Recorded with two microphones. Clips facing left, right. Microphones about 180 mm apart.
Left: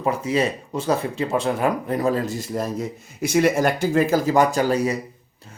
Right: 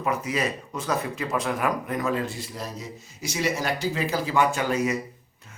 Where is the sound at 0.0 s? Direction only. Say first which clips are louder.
Left 5 dB; 30° left (ahead or behind).